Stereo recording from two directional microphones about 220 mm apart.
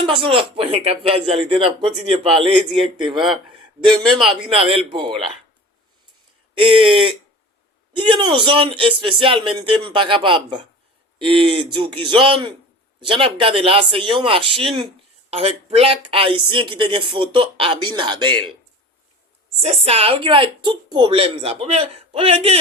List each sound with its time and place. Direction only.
0.0 s speech: 20° right (ahead or behind)
4.2 s speech: 25° right (ahead or behind)
6.5 s speech: 20° right (ahead or behind)
7.9 s speech: 20° right (ahead or behind)
19.5 s speech: 30° right (ahead or behind)